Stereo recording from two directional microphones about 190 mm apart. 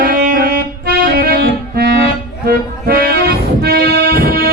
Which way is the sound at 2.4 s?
55° right (ahead or behind).